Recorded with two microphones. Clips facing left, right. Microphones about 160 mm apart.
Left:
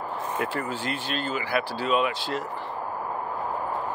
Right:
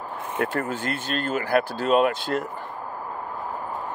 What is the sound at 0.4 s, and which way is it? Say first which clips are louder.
Speech: right 6 dB; 50° right (ahead or behind).